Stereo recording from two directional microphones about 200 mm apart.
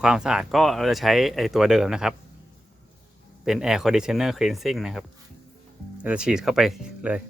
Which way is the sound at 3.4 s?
Centre (ahead or behind).